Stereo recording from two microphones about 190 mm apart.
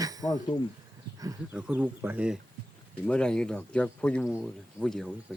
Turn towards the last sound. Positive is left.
turn(degrees=5)  # may be behind; listen again after turning